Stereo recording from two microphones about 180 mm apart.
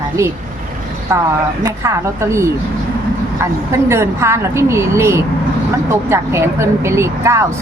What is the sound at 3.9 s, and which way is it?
Speech, 15° right (ahead or behind).